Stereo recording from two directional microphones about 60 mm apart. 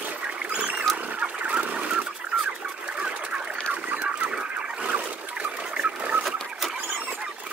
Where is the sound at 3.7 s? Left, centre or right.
Right.